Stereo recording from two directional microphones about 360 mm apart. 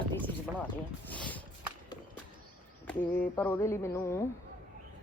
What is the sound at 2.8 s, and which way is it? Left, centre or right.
Speech, centre.